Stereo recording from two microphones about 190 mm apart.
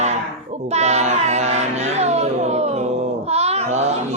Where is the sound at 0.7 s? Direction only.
35° right (ahead or behind).